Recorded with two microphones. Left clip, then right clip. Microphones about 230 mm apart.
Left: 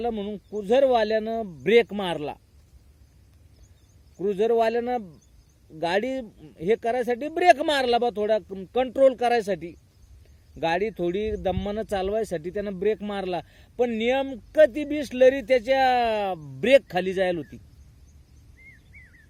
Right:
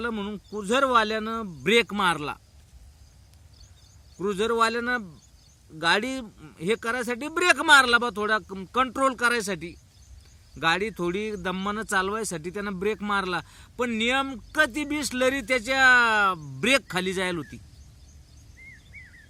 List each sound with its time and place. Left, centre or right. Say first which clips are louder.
0.0 s a man's voice: left 2 dB; centre
4.3 s speech: left 2 dB; centre